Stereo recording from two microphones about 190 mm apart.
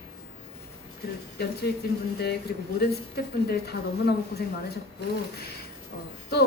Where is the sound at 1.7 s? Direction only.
55° left (ahead or behind).